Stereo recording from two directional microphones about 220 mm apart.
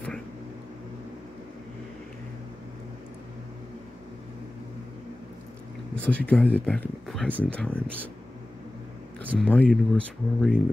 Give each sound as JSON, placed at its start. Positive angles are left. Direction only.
{"t": 6.0, "sound": "speech", "side_deg": 5}
{"t": 9.4, "sound": "speech", "side_deg": 5}